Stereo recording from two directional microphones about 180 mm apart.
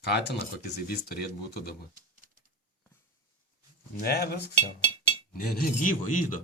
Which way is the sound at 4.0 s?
60° left (ahead or behind).